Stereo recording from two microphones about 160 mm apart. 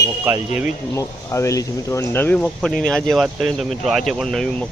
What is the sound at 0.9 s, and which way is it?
Speech, 20° left (ahead or behind).